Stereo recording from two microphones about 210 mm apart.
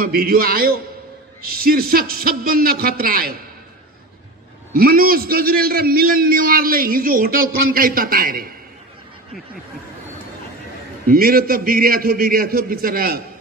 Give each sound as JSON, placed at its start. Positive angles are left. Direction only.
{"t": 0.0, "sound": "a man's voice", "side_deg": -45}
{"t": 4.7, "sound": "a man's voice", "side_deg": -45}
{"t": 11.1, "sound": "a man's voice", "side_deg": -45}